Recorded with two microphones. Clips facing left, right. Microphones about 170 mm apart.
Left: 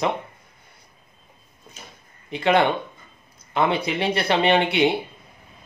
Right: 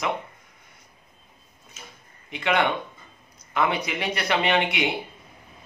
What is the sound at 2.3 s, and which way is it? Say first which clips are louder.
Speech: left 4 dB; 30° left (ahead or behind).